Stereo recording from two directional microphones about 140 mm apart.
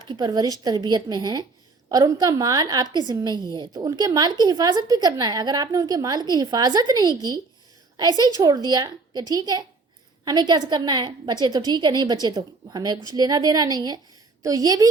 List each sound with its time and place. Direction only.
0.1 s a woman's voice: 30° right (ahead or behind)